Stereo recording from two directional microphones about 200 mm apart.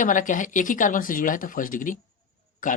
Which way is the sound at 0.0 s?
40° left (ahead or behind).